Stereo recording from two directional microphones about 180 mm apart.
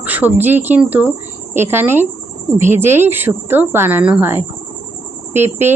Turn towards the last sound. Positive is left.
turn(degrees=-10)  # may be behind; listen again after turning